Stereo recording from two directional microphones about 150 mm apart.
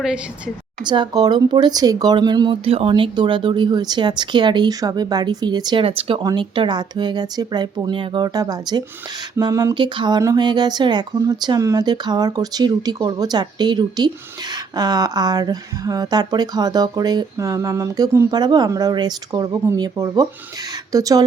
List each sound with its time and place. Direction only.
0.0 s a woman's voice: 5° right (ahead or behind)
0.9 s speech: 30° right (ahead or behind)